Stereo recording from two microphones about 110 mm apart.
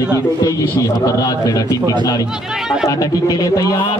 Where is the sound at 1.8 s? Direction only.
40° right (ahead or behind).